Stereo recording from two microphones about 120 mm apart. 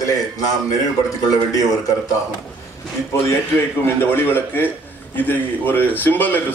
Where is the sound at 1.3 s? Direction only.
30° left (ahead or behind).